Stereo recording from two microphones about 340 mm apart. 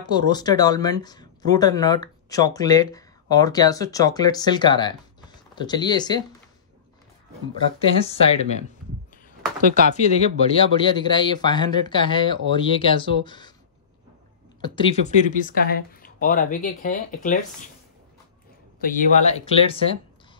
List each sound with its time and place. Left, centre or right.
0.0 s speech: centre
7.8 s speech: centre
9.9 s speech: centre
14.6 s speech: centre
18.8 s speech: left